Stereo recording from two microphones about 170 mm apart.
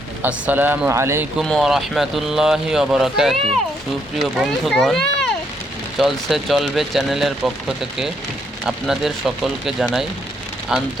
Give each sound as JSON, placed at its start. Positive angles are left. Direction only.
{"t": 0.2, "sound": "speech", "side_deg": -10}
{"t": 1.4, "sound": "speech", "side_deg": 0}